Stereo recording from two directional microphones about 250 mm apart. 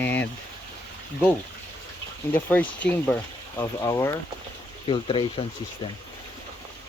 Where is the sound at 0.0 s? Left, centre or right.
Centre.